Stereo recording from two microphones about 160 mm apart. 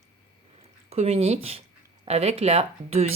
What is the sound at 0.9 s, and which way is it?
Speech, 40° right (ahead or behind).